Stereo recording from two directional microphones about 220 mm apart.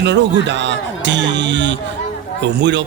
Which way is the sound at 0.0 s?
55° right (ahead or behind).